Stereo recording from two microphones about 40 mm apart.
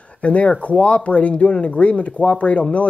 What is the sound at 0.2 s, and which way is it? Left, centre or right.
Speech, left.